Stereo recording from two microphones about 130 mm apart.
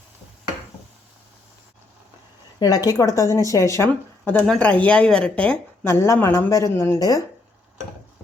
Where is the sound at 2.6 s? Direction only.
30° left (ahead or behind).